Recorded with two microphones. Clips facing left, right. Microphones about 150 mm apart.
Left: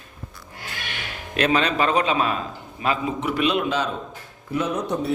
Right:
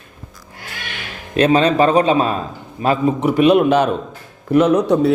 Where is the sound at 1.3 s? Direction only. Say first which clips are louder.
Right 8 dB; 30° right (ahead or behind); by 4.0 s 55° right (ahead or behind).